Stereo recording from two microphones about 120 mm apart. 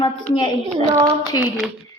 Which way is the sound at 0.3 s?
45° left (ahead or behind).